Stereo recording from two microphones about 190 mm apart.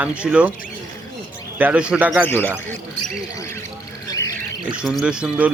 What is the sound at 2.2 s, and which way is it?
Speech, 10° left (ahead or behind).